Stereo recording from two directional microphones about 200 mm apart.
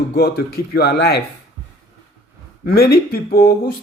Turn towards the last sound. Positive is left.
turn(degrees=50)  # may be behind; listen again after turning